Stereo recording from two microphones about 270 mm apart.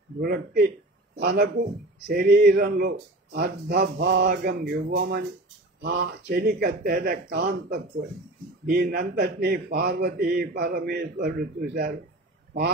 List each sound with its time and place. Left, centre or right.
0.2 s a man's voice: right